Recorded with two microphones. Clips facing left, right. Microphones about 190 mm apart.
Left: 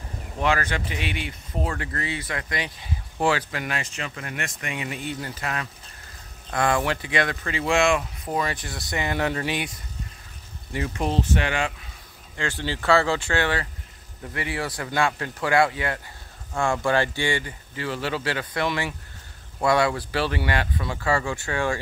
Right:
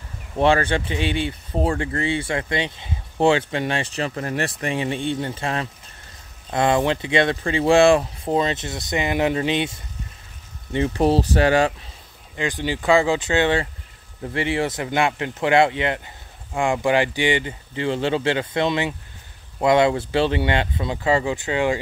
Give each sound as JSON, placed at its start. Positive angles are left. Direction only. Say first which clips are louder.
{"t": 0.4, "sound": "speech", "louder": "right 6 dB", "side_deg": -30}
{"t": 11.0, "sound": "speech", "louder": "right 7 dB", "side_deg": -35}
{"t": 12.4, "sound": "speech", "louder": "right 4 dB", "side_deg": -15}